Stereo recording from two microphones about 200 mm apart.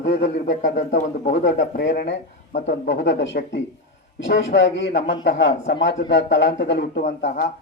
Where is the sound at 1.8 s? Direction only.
55° left (ahead or behind).